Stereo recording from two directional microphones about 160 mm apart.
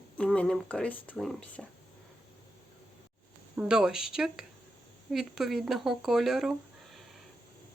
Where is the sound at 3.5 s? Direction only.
5° right (ahead or behind).